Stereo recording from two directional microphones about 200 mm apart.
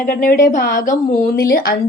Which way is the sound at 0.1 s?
45° left (ahead or behind).